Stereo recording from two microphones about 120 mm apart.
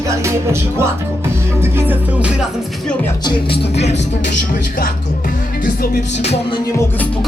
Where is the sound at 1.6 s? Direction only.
15° right (ahead or behind).